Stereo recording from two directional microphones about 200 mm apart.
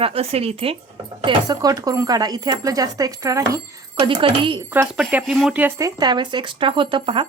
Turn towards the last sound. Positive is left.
turn(degrees=-25)  # may be behind; listen again after turning